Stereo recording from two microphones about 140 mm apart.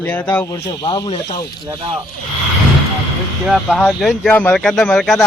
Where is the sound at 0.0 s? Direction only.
15° left (ahead or behind).